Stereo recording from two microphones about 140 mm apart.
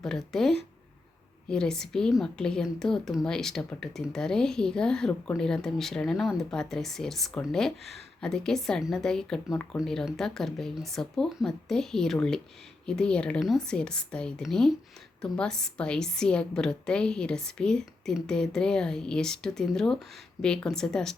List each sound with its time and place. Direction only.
0.0 s a woman's voice: 5° left (ahead or behind)